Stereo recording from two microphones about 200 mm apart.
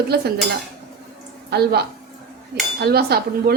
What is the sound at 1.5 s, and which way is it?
Speech, 55° right (ahead or behind).